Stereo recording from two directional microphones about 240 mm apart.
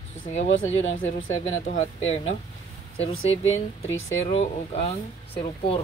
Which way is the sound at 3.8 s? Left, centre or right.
Left.